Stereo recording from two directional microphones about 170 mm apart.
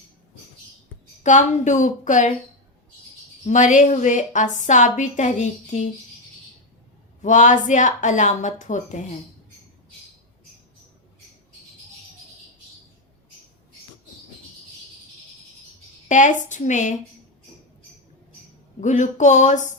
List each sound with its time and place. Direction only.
1.2 s a woman's voice: 45° left (ahead or behind)
3.4 s a woman's voice: 45° left (ahead or behind)
7.2 s a woman's voice: 45° left (ahead or behind)
16.0 s a woman's voice: 45° left (ahead or behind)
18.8 s a woman's voice: 45° left (ahead or behind)